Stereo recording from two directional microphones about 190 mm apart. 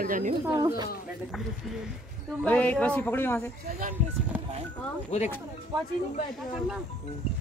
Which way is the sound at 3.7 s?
45° right (ahead or behind).